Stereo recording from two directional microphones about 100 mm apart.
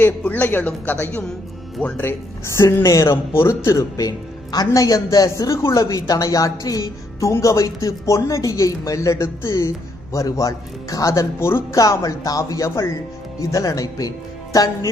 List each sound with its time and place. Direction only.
0.0 s a woman's voice: 20° left (ahead or behind); by 14.7 s 35° left (ahead or behind)